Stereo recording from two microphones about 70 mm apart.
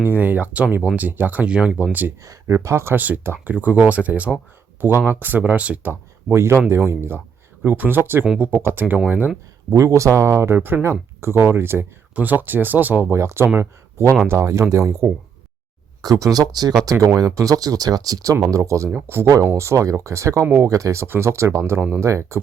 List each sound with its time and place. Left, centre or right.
0.2 s speech: right
2.6 s speech: right
2.9 s speech: right
6.3 s speech: right
9.7 s speech: right
12.1 s speech: right
13.1 s speech: right
16.0 s speech: right
16.4 s speech: right
17.2 s speech: right
19.0 s speech: right
21.6 s speech: right
22.0 s speech: right